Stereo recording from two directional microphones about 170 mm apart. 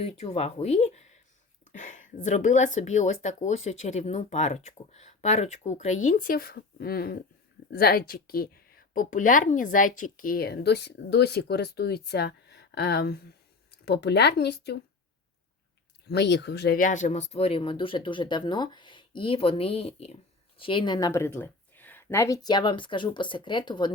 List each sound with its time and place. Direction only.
0.0 s a woman's voice: 40° left (ahead or behind); by 14.8 s 75° left (ahead or behind)
16.0 s speech: 80° left; by 21.1 s 25° left (ahead or behind)
21.1 s speech: 15° left (ahead or behind)